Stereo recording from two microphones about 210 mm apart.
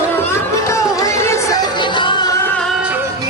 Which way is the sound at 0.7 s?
15° left (ahead or behind).